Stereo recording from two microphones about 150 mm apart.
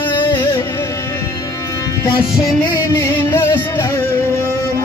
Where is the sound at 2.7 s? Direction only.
20° left (ahead or behind).